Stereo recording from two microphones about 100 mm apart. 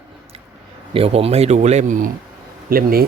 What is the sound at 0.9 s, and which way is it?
Speech, 80° right.